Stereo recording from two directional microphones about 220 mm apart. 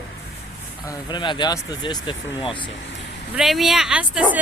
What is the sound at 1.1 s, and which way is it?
Speech, 20° left (ahead or behind).